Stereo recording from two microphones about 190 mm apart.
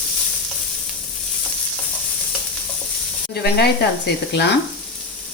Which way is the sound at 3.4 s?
55° left (ahead or behind).